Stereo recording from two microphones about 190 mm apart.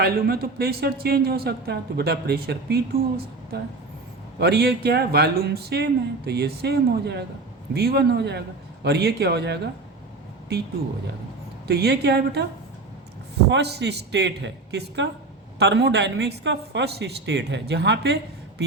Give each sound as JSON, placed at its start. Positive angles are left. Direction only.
{"t": 0.0, "sound": "a woman's voice", "side_deg": -55}
{"t": 4.4, "sound": "a woman's voice", "side_deg": -60}
{"t": 11.7, "sound": "a woman's voice", "side_deg": -60}
{"t": 13.5, "sound": "a woman's voice", "side_deg": -60}